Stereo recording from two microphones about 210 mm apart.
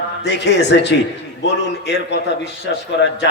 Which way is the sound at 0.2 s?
55° left (ahead or behind).